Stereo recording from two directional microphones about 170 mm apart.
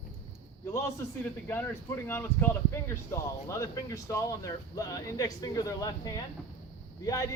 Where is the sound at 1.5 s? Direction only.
10° left (ahead or behind).